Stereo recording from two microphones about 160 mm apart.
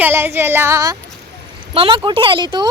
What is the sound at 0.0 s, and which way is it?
Speech, 15° right (ahead or behind).